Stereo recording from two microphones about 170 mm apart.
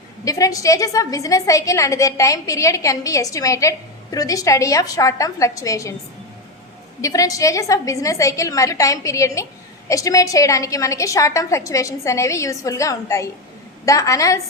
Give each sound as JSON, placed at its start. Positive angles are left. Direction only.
{"t": 0.3, "sound": "a woman's voice", "side_deg": 20}
{"t": 7.0, "sound": "a woman's voice", "side_deg": 20}